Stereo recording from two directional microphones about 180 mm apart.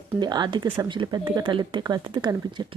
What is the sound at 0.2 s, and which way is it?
Speech, 25° right (ahead or behind).